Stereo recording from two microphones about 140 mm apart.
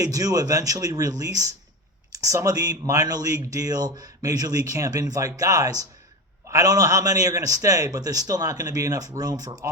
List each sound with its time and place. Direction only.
0.0 s speech: 25° right (ahead or behind)